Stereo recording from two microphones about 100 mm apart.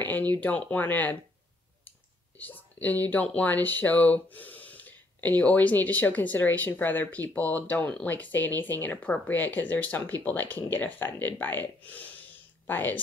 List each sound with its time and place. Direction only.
0.0 s speech: 15° left (ahead or behind)